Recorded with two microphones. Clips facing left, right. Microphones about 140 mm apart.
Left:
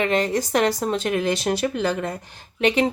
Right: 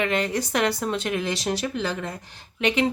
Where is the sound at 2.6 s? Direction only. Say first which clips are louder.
Left 3 dB; 40° left (ahead or behind).